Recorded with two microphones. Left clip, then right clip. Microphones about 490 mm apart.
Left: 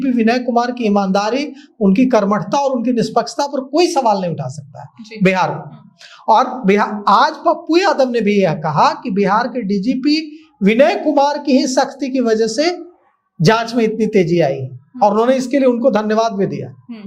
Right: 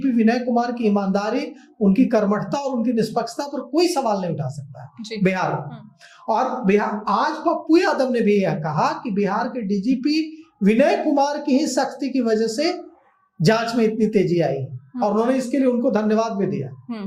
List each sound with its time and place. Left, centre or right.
0.0 s a man's voice: left